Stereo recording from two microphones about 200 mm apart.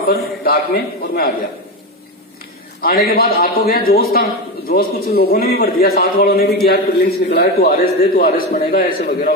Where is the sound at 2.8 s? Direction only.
50° left (ahead or behind).